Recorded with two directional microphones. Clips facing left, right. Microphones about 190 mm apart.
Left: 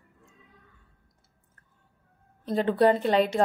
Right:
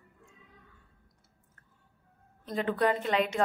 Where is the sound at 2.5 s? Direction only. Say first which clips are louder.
Left 6 dB; 30° left (ahead or behind).